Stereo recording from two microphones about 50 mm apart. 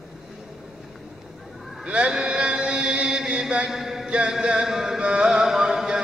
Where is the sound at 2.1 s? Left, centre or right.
Centre.